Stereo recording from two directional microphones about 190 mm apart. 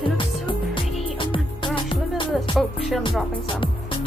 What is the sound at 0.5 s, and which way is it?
Music, 25° left (ahead or behind).